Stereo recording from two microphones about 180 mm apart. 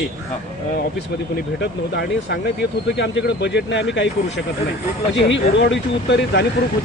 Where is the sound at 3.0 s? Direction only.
75° left (ahead or behind).